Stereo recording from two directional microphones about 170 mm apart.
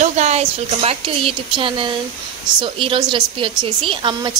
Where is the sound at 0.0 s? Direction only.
40° right (ahead or behind).